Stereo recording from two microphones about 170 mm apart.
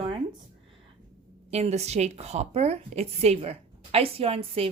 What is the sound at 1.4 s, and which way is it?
A woman's voice, 40° right (ahead or behind).